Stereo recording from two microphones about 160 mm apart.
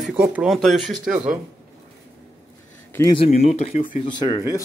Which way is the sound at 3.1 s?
40° left (ahead or behind).